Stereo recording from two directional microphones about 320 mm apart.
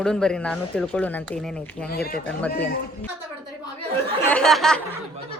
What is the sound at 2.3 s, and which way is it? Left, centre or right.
Speech, centre.